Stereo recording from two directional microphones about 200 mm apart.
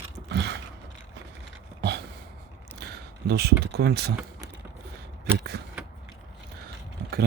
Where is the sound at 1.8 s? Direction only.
55° right (ahead or behind).